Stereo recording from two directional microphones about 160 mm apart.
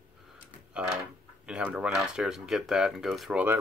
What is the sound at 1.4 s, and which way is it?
Speech, 5° right (ahead or behind).